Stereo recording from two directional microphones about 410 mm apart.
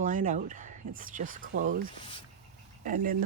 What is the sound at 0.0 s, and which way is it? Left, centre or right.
Speech, centre.